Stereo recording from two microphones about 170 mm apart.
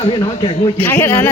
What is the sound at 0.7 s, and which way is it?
Speech, 10° left (ahead or behind).